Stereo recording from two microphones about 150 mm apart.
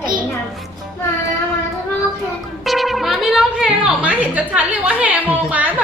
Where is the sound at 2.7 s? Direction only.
Centre (ahead or behind).